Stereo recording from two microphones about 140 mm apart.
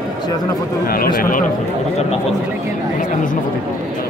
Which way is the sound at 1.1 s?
90° left.